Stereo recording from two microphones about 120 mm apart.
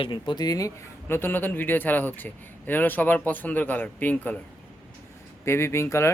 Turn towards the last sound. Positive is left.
turn(degrees=20)  # may be behind; listen again after turning